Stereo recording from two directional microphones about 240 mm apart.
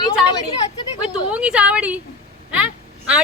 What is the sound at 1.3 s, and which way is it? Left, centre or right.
Speech, centre.